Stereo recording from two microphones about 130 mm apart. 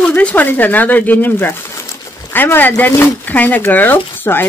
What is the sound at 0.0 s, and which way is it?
Speech, 10° left (ahead or behind).